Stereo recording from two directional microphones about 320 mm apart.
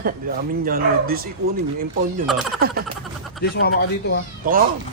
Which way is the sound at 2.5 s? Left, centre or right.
Right.